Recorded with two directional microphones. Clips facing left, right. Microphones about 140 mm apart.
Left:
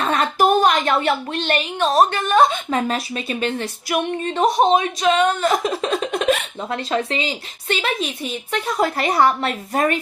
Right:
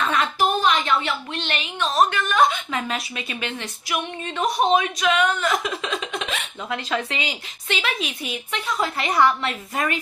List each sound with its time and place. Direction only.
0.0 s a woman's voice: 40° left (ahead or behind)
4.4 s speech: 30° left (ahead or behind)